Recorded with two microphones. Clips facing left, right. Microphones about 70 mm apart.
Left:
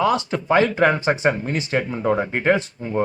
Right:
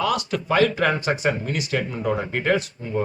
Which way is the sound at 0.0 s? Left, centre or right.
Left.